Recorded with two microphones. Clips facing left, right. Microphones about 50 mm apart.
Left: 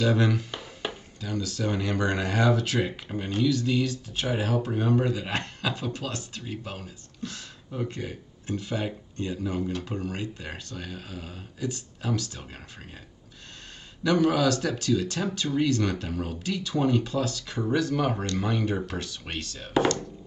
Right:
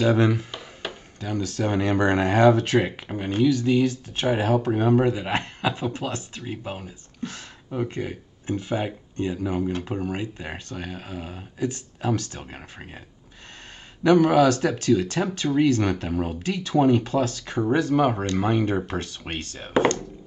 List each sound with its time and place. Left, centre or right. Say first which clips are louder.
0.0 s speech: right 4 dB; right
1.2 s speech: right 4 dB; right
7.2 s speech: right 3 dB; right
14.0 s speech: right 6 dB; right